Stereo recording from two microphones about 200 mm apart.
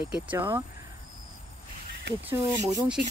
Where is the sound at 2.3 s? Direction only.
15° right (ahead or behind).